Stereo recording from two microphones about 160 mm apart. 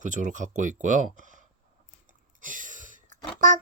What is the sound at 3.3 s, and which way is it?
Speech, 50° right (ahead or behind).